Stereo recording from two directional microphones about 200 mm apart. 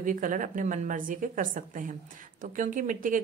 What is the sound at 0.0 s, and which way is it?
Speech, 40° right (ahead or behind).